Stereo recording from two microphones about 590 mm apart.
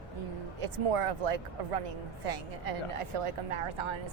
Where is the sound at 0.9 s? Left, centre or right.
Right.